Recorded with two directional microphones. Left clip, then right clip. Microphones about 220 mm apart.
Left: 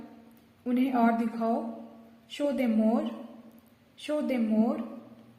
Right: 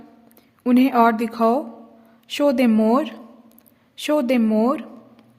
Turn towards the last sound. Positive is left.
turn(degrees=-45)  # may be behind; listen again after turning